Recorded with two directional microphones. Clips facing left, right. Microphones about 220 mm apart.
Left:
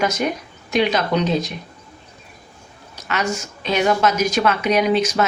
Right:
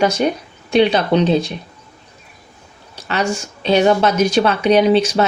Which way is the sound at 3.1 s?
30° right (ahead or behind).